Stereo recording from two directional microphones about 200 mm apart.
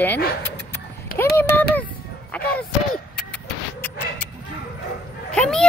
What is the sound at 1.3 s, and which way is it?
Speech, 10° left (ahead or behind).